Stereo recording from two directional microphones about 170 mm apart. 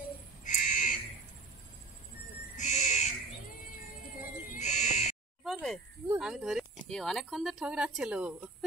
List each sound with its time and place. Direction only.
0.5 s squawk: 50° left (ahead or behind)
2.5 s owl: 45° left (ahead or behind)
4.2 s owl: 45° left (ahead or behind)
5.4 s a sound: centre (ahead or behind)
6.1 s speech: 5° right (ahead or behind)